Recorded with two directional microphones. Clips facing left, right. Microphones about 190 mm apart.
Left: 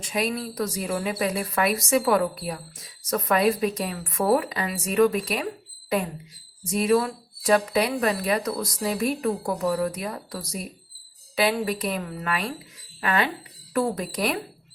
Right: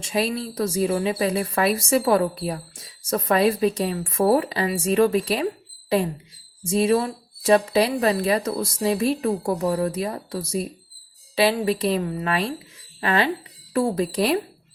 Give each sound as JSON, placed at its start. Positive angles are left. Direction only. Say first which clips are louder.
{"t": 0.0, "sound": "speech", "louder": "right 3 dB", "side_deg": -30}
{"t": 6.7, "sound": "speech", "louder": "right 2 dB", "side_deg": -25}